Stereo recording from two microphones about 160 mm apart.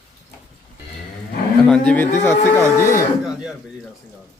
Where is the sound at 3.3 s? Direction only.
5° right (ahead or behind).